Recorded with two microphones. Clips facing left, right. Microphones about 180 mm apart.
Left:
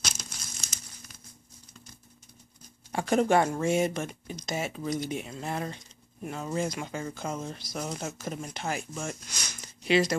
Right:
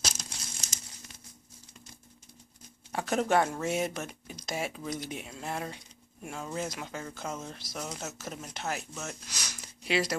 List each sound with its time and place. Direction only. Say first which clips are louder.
0.0 s crumpling: right 1 dB; 35° right (ahead or behind)
2.9 s speech: left 4 dB; centre (ahead or behind)
9.3 s a sound: left 1 dB; 5° right (ahead or behind)